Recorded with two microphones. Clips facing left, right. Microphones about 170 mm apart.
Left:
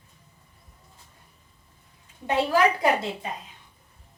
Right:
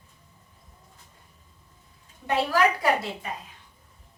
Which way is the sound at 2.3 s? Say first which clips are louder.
Left 1 dB; 25° left (ahead or behind).